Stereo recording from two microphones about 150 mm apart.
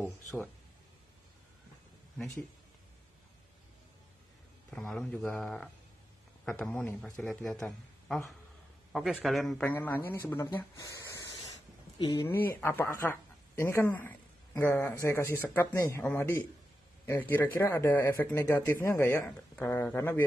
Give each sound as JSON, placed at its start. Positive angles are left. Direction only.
{"t": 2.1, "sound": "speech", "side_deg": 5}
{"t": 4.6, "sound": "speech", "side_deg": 5}
{"t": 9.1, "sound": "speech", "side_deg": 0}
{"t": 12.3, "sound": "speech", "side_deg": 15}